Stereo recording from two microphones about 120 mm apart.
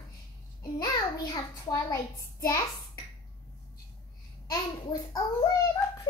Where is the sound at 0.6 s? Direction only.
30° left (ahead or behind).